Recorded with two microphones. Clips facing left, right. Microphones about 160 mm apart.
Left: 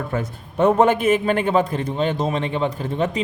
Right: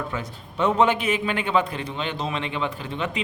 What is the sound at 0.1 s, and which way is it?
A man's voice, 50° left (ahead or behind).